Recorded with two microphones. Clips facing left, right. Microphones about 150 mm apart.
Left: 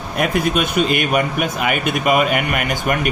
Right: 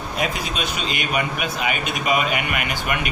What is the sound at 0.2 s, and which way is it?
Speech, 55° left (ahead or behind).